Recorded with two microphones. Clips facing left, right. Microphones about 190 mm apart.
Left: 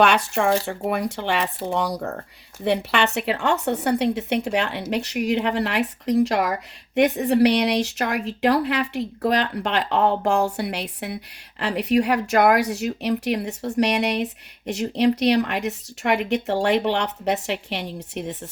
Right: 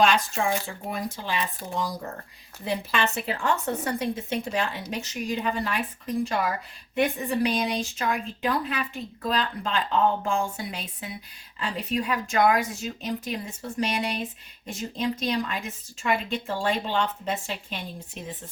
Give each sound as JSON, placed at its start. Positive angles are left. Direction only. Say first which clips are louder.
{"t": 0.0, "sound": "speech", "louder": "left 4 dB", "side_deg": 65}